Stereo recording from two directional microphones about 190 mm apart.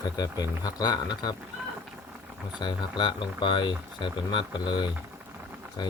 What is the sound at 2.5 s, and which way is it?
Speech, 25° left (ahead or behind).